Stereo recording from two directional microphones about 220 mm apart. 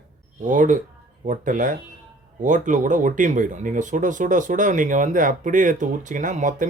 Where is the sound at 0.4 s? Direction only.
35° right (ahead or behind).